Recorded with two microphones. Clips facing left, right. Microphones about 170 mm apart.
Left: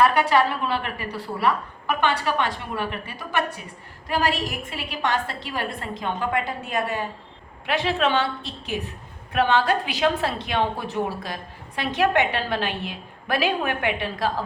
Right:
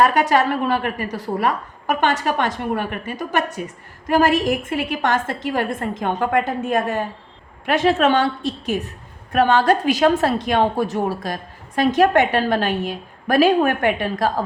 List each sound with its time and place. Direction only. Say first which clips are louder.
0.0 s a woman's voice: right 3 dB; 45° right (ahead or behind)